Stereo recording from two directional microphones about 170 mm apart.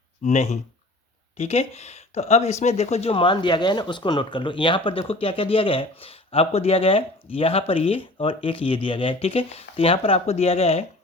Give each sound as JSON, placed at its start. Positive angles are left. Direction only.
{"t": 0.3, "sound": "speech", "side_deg": 45}